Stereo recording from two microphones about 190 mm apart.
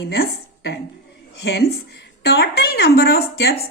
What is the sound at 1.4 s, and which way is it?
A woman's voice, 60° left (ahead or behind).